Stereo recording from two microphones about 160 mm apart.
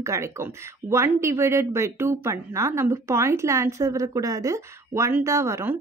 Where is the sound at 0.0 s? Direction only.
15° right (ahead or behind).